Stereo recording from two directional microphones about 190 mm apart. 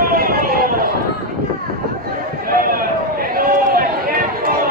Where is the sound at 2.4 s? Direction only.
50° right (ahead or behind).